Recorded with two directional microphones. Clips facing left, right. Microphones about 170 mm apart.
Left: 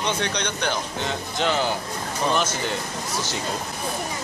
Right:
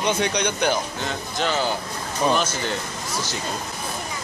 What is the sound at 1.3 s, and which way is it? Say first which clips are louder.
Speech: even; 15° left (ahead or behind).